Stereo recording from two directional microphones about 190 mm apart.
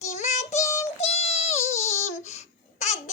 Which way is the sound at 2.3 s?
35° left (ahead or behind).